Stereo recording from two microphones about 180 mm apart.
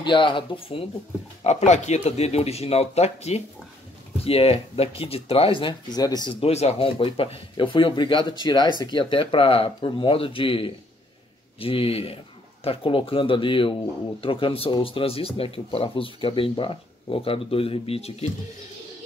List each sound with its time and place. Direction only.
0.0 s speech: 25° left (ahead or behind)